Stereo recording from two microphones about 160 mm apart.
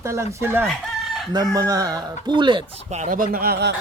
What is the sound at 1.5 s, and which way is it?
Speech, 20° right (ahead or behind).